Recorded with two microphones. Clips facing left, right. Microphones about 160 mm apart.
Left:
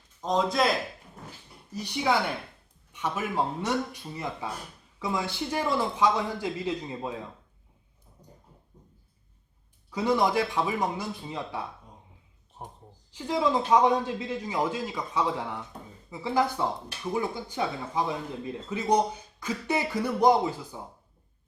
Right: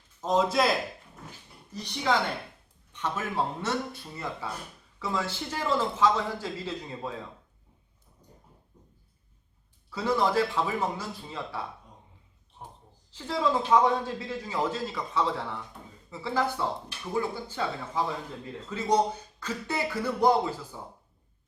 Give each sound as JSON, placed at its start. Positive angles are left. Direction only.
{"t": 0.2, "sound": "a man's voice", "side_deg": 0}
{"t": 1.7, "sound": "speech", "side_deg": 10}
{"t": 9.9, "sound": "speech", "side_deg": 15}
{"t": 13.1, "sound": "speech", "side_deg": 15}